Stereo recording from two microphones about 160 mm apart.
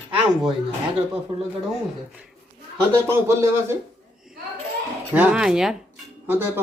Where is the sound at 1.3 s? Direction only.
35° right (ahead or behind).